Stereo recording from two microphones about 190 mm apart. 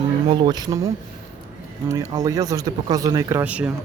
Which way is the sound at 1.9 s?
15° right (ahead or behind).